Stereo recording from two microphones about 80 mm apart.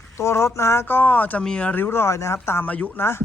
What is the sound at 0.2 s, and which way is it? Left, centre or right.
Speech, left.